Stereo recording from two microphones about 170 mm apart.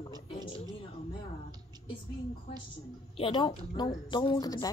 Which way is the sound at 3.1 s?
30° left (ahead or behind).